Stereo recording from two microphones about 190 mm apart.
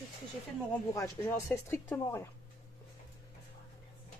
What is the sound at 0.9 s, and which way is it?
Speech, 15° left (ahead or behind).